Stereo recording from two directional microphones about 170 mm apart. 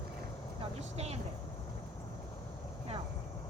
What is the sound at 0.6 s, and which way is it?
Vehicle, 40° right (ahead or behind).